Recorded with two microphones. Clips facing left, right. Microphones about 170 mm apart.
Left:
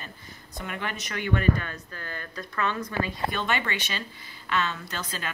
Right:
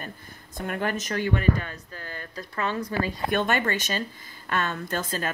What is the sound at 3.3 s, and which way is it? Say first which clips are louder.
A woman's voice: right 5 dB; 50° right (ahead or behind).